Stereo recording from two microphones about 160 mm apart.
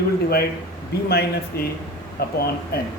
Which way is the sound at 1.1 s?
75° left (ahead or behind).